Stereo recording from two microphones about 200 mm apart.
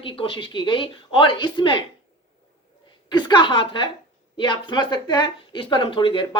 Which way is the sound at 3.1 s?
20° left (ahead or behind).